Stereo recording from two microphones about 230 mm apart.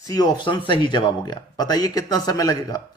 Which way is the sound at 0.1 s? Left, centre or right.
Centre.